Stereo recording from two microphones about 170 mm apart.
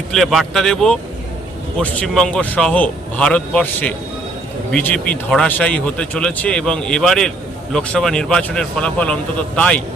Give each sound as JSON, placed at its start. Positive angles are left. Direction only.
{"t": 0.1, "sound": "a man's voice", "side_deg": 0}